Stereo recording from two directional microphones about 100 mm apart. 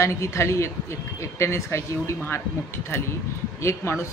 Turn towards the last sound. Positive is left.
turn(degrees=25)  # may be behind; listen again after turning